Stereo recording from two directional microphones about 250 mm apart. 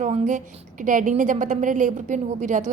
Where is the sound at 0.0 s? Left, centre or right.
Right.